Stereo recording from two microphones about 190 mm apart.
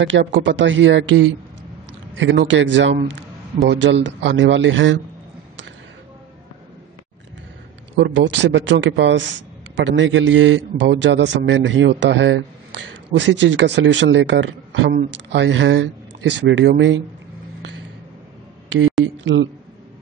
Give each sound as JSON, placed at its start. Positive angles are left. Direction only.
{"t": 0.0, "sound": "a man's voice", "side_deg": -80}
{"t": 2.1, "sound": "a man's voice", "side_deg": -70}
{"t": 7.9, "sound": "a man's voice", "side_deg": -75}
{"t": 19.2, "sound": "a man's voice", "side_deg": -75}